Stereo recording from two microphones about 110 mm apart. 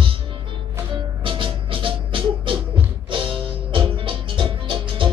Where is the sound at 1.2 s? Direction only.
50° right (ahead or behind).